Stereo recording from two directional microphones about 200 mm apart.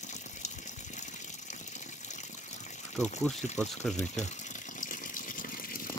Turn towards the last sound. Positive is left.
turn(degrees=40)  # may be behind; listen again after turning